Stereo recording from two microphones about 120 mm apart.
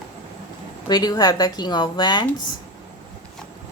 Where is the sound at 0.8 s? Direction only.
35° left (ahead or behind).